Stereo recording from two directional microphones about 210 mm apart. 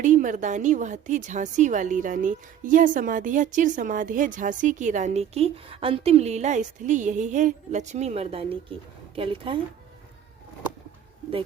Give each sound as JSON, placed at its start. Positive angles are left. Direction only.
{"t": 0.0, "sound": "a woman's voice", "side_deg": -35}